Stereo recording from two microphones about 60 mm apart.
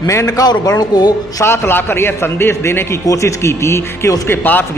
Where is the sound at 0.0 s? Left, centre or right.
Left.